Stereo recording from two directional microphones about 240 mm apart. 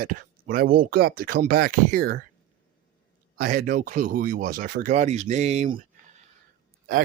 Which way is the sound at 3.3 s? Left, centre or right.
Right.